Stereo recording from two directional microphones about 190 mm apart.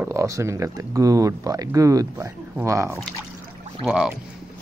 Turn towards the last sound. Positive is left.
turn(degrees=-5)  # may be behind; listen again after turning